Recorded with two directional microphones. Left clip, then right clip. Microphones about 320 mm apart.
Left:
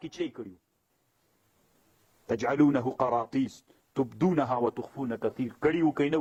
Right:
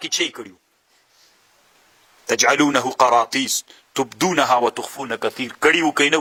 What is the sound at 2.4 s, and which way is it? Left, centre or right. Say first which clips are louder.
Speech: right 9 dB; centre.